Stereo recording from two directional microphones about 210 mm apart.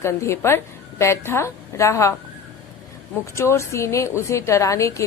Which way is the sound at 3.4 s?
15° left (ahead or behind).